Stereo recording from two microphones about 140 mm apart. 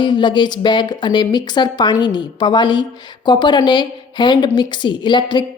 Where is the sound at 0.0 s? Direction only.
35° left (ahead or behind).